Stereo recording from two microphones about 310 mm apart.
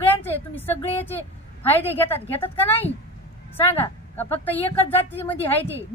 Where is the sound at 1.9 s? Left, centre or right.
Centre.